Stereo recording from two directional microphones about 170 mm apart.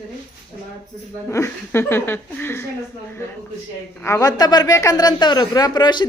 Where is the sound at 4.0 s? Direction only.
20° left (ahead or behind).